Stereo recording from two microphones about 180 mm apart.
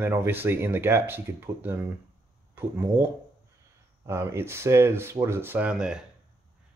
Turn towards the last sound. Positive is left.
turn(degrees=-5)  # may be behind; listen again after turning